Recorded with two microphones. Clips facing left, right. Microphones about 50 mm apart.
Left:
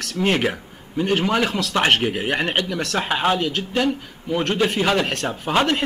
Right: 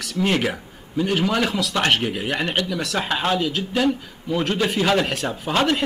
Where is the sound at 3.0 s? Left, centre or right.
Centre.